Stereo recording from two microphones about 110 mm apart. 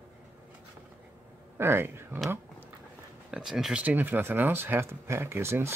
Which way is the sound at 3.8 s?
15° right (ahead or behind).